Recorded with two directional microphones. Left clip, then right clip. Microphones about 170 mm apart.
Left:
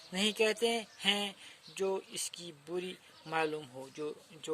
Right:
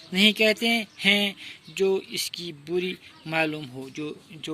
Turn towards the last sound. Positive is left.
turn(degrees=50)  # may be behind; listen again after turning